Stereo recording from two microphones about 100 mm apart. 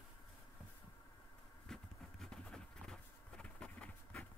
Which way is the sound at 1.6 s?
5° left (ahead or behind).